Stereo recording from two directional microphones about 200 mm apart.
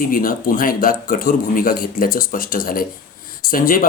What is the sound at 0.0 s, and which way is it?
Speech, 45° left (ahead or behind).